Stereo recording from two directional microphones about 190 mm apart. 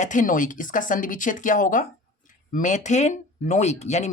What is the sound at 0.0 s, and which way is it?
Speech, 40° left (ahead or behind).